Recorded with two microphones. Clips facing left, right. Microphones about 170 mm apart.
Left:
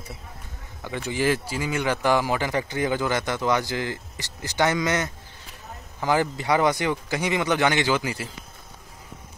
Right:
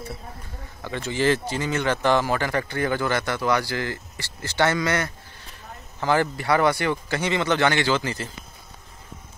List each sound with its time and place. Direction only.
0.8 s speech: 15° left (ahead or behind)